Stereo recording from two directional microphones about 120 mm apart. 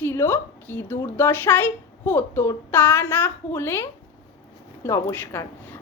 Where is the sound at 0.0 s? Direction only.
20° left (ahead or behind).